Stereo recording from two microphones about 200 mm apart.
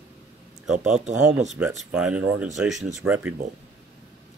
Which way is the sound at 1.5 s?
5° right (ahead or behind).